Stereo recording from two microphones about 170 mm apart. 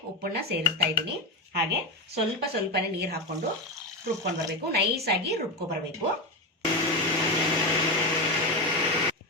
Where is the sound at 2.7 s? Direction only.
70° right (ahead or behind).